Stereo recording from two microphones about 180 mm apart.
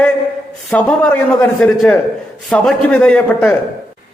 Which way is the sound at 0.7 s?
5° left (ahead or behind).